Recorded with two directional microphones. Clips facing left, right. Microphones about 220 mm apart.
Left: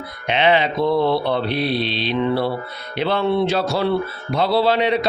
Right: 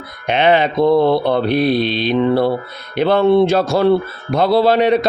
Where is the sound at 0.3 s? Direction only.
45° right (ahead or behind).